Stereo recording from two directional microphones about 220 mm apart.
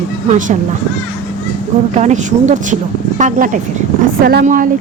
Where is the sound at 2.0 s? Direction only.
30° right (ahead or behind).